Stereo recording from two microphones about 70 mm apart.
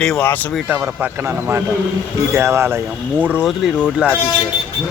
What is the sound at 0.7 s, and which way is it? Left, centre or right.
Speech, right.